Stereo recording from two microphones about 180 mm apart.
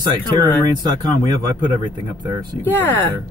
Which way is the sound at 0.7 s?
20° right (ahead or behind).